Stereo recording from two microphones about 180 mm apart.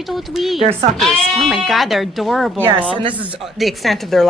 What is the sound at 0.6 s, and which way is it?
Speech, 35° right (ahead or behind).